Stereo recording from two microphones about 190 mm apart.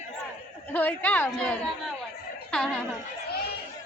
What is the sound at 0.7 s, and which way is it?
A woman's voice, 10° left (ahead or behind).